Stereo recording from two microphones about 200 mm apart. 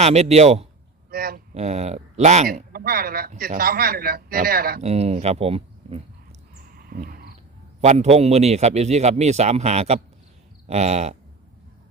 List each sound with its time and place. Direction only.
0.0 s a man's voice: 30° right (ahead or behind)
1.1 s a sound: 50° right (ahead or behind)
1.5 s a man's voice: 35° right (ahead or behind)
2.7 s a man's voice: 45° right (ahead or behind)
4.8 s a man's voice: 30° right (ahead or behind)
6.7 s wild animals: 45° right (ahead or behind)
7.8 s a man's voice: 30° right (ahead or behind)